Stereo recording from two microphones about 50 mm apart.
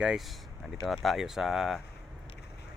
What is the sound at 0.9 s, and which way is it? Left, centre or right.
Speech, centre.